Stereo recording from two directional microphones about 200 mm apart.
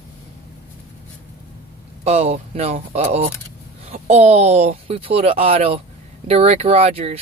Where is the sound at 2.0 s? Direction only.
30° right (ahead or behind).